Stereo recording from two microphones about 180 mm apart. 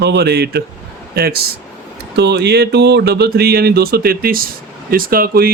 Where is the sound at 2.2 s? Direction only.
70° right (ahead or behind).